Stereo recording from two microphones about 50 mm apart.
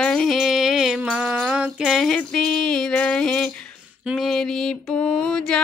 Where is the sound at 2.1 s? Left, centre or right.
Centre.